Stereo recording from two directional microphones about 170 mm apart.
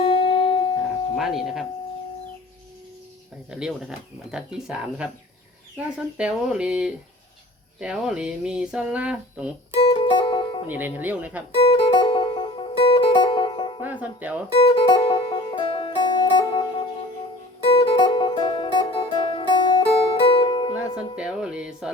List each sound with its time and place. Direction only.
0.0 s music: 35° left (ahead or behind)
1.1 s speech: centre (ahead or behind)
3.5 s speech: 5° right (ahead or behind)
9.8 s music: 30° left (ahead or behind)
10.7 s speech: 10° right (ahead or behind)
11.6 s music: 35° left (ahead or behind)
13.8 s speech: 10° right (ahead or behind)
14.6 s music: 30° left (ahead or behind)
21.2 s music: 5° right (ahead or behind)